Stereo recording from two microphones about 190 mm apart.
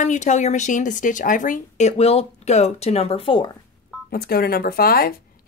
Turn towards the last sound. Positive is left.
turn(degrees=50)  # may be behind; listen again after turning